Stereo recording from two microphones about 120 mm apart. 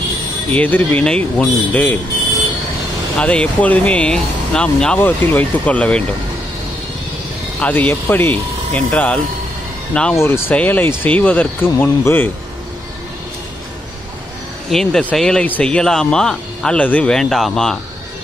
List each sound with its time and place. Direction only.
0.5 s speech: 15° left (ahead or behind)
3.2 s speech: 10° left (ahead or behind)
7.6 s speech: 15° left (ahead or behind)
10.1 s speech: 20° left (ahead or behind)
14.7 s speech: 5° left (ahead or behind)